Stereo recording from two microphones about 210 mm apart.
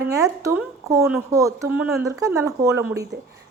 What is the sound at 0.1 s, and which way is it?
Speech, 15° right (ahead or behind).